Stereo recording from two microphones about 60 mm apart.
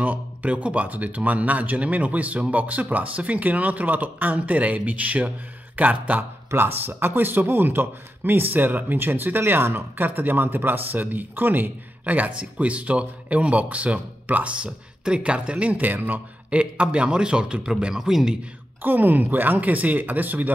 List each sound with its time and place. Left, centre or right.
0.0 s speech: right
18.8 s speech: right